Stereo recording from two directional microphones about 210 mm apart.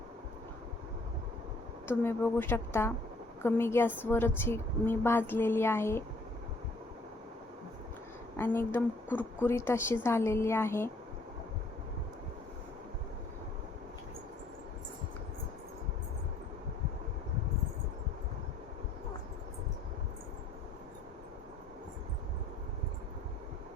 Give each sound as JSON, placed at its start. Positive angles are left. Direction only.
{"t": 1.9, "sound": "a woman's voice", "side_deg": 10}
{"t": 8.4, "sound": "a woman's voice", "side_deg": 10}